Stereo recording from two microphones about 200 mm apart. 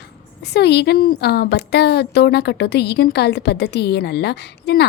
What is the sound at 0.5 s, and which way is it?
A woman's voice, 55° left (ahead or behind).